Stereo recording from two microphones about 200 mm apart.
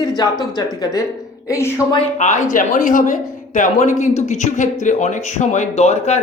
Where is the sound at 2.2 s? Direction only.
35° left (ahead or behind).